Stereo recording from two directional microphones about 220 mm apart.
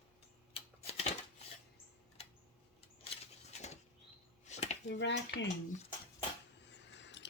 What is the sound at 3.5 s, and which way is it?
Bird flight, 30° left (ahead or behind).